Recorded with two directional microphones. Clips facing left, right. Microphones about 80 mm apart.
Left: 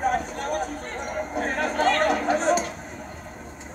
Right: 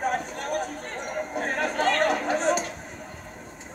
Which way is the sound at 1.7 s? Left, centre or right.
Centre.